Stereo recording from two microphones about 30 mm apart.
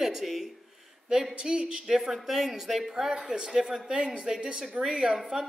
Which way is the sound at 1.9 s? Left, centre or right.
Centre.